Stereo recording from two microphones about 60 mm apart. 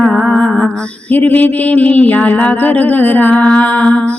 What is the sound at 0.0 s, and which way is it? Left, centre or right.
Music, centre.